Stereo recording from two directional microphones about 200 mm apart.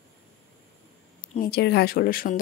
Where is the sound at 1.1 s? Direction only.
45° left (ahead or behind).